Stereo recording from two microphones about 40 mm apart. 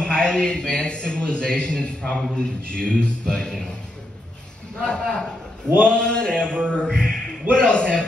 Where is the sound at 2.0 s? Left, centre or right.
Centre.